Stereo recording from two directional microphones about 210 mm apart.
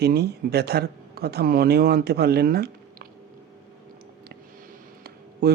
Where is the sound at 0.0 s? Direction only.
50° right (ahead or behind).